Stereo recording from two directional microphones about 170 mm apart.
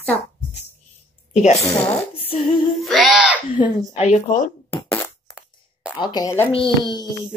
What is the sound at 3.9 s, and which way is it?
Speech, 40° left (ahead or behind).